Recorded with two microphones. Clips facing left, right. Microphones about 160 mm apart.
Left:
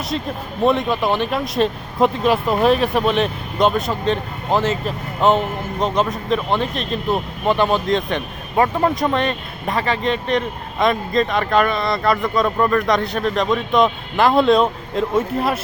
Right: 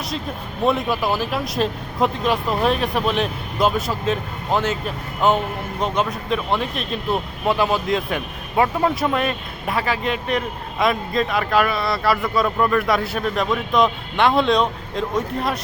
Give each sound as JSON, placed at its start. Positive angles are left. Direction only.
{"t": 0.6, "sound": "speech", "side_deg": 0}